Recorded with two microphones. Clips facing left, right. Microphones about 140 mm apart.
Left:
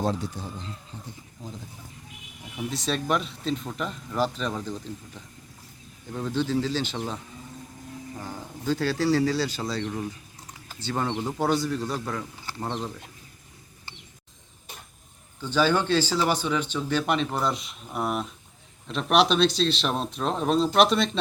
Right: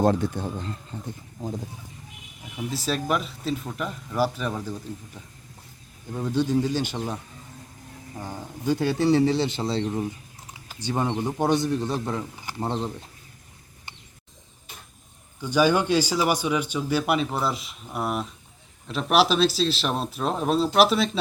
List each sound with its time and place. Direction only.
0.0 s speech: 55° right (ahead or behind)
2.6 s speech: 5° right (ahead or behind)
8.2 s a man's voice: 15° right (ahead or behind)
15.4 s speech: 15° right (ahead or behind)